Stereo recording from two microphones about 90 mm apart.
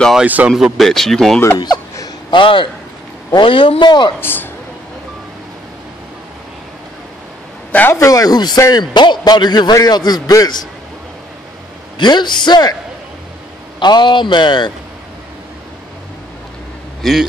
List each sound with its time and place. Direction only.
0.1 s speech: 15° right (ahead or behind)
0.5 s speech: 5° right (ahead or behind)
1.6 s chuckle: 50° left (ahead or behind)
2.3 s a woman's voice: 65° left (ahead or behind)
4.2 s speech: 25° left (ahead or behind)
7.7 s speech: 25° left (ahead or behind)
8.1 s a man's voice: 45° left (ahead or behind)
12.0 s a man's voice: 55° left (ahead or behind)
13.7 s a man's voice: 55° left (ahead or behind)
17.0 s speech: centre (ahead or behind)